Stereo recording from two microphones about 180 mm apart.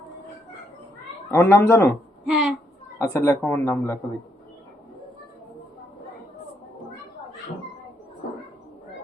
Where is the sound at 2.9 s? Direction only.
15° left (ahead or behind).